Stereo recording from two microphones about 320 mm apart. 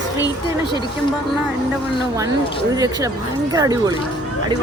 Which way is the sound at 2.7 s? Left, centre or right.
Centre.